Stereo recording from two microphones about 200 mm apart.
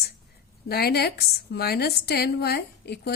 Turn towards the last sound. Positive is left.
turn(degrees=55)  # may be behind; listen again after turning